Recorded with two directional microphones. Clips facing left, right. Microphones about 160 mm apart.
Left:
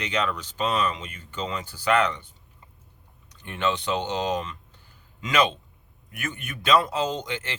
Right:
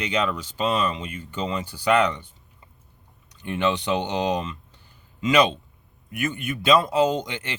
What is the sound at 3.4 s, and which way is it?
Speech, 15° right (ahead or behind).